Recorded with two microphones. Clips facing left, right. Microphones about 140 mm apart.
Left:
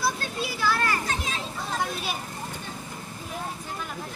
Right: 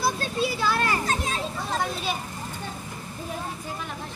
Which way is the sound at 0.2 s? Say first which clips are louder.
Right 3 dB; 25° right (ahead or behind).